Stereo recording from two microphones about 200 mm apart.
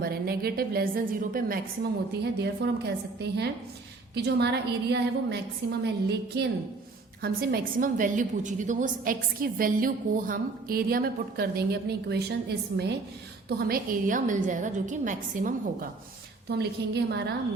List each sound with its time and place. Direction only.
0.0 s a woman's voice: 50° right (ahead or behind)
2.1 s a woman's voice: 55° right (ahead or behind)
16.5 s a woman's voice: 55° right (ahead or behind)